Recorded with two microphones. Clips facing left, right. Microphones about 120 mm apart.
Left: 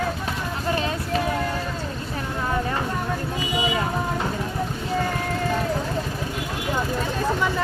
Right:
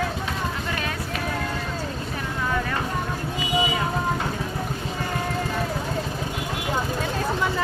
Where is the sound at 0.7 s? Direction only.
30° left (ahead or behind).